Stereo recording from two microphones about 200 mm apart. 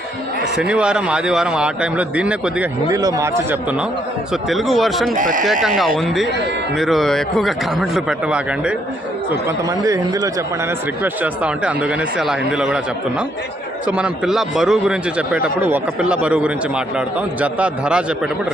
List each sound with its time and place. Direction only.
0.7 s a man's voice: 5° right (ahead or behind)
2.9 s a man's voice: 15° right (ahead or behind); by 5.1 s centre (ahead or behind)
5.1 s speech: 40° right (ahead or behind)
5.6 s a man's voice: centre (ahead or behind)
9.6 s a man's voice: 15° right (ahead or behind)